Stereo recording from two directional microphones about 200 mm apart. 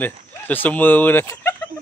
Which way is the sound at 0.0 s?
10° left (ahead or behind).